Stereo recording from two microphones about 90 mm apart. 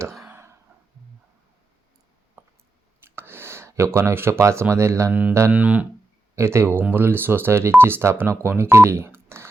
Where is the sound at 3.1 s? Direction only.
25° right (ahead or behind).